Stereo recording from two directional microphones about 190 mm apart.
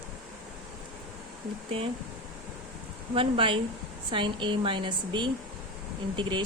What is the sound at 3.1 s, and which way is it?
Speech, 30° right (ahead or behind).